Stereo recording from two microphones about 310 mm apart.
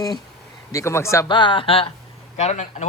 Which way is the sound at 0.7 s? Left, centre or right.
Centre.